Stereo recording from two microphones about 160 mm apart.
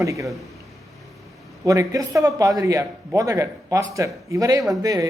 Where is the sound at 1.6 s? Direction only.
20° right (ahead or behind).